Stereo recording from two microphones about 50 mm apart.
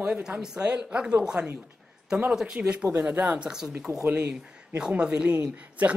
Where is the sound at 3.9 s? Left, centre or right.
Right.